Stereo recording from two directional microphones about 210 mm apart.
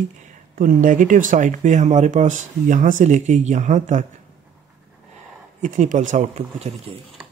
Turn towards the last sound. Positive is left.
turn(degrees=-30)  # may be behind; listen again after turning